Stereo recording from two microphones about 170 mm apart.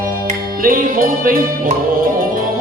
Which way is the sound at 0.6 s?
55° right (ahead or behind).